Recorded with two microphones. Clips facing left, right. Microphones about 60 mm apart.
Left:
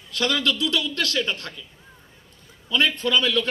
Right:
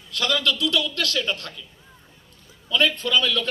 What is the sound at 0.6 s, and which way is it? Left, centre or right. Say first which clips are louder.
Speech: right 1 dB; left.